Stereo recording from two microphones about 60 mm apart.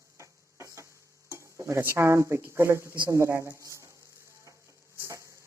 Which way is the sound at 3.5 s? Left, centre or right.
Right.